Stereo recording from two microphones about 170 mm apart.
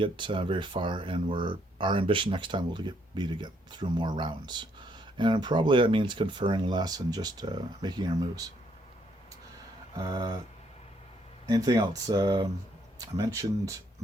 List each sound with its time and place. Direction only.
0.0 s speech: 30° right (ahead or behind)
10.0 s speech: 25° right (ahead or behind)
11.4 s speech: 20° right (ahead or behind)